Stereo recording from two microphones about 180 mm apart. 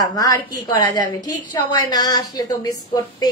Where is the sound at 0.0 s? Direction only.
20° left (ahead or behind).